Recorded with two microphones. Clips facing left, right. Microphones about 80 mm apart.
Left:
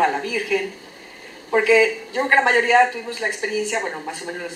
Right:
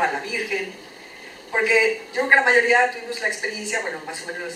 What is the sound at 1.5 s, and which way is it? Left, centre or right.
Speech, centre.